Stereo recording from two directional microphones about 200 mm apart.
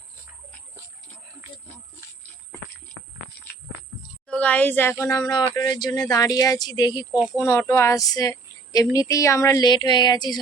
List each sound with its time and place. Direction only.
4.3 s speech: 5° left (ahead or behind)